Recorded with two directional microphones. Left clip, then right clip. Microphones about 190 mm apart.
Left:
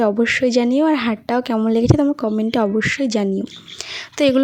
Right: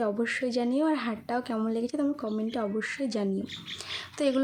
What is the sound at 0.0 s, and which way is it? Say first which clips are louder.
Speech: left 12 dB; 45° left (ahead or behind).